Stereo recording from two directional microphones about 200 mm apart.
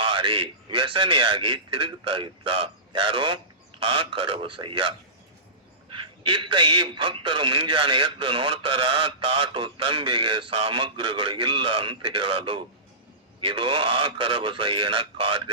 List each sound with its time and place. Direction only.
0.0 s a man's voice: 25° right (ahead or behind)